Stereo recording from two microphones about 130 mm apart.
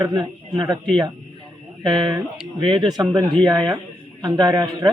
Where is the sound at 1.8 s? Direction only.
35° right (ahead or behind).